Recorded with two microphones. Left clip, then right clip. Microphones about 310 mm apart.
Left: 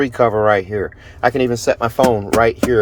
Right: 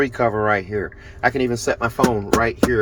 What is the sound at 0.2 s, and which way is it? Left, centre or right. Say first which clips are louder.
Speech: left 9 dB; centre.